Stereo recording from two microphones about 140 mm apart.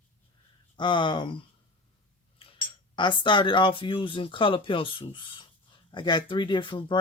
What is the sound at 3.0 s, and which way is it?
Speech, 35° left (ahead or behind).